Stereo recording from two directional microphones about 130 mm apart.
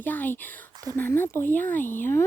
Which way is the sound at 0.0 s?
15° left (ahead or behind).